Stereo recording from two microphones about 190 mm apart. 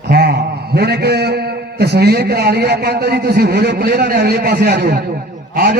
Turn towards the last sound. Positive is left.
turn(degrees=-55)  # may be behind; listen again after turning